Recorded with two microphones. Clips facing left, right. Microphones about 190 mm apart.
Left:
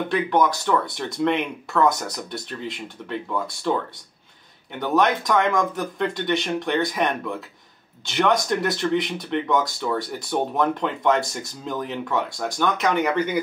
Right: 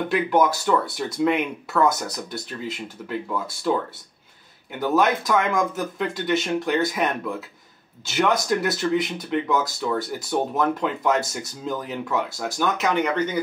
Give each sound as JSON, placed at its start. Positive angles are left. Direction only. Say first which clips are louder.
{"t": 0.1, "sound": "speech", "louder": "right 1 dB", "side_deg": -5}
{"t": 4.7, "sound": "speech", "louder": "even", "side_deg": -5}